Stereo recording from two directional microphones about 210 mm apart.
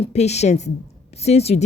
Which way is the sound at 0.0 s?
30° left (ahead or behind).